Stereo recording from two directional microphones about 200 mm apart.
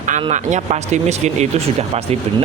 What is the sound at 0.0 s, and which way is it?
Speech, 35° right (ahead or behind).